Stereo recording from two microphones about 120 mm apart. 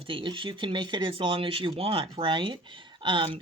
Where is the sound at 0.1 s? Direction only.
45° right (ahead or behind).